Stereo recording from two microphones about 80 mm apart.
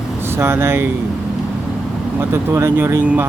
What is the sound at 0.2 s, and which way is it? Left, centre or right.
Speech, right.